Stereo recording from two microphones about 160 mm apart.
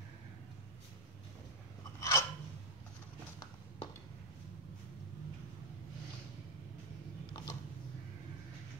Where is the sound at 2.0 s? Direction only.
20° left (ahead or behind).